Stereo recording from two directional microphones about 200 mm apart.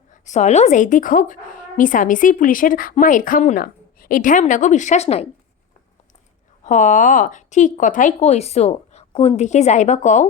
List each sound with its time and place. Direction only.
0.1 s a woman's voice: 35° left (ahead or behind)
6.7 s a woman's voice: 40° left (ahead or behind)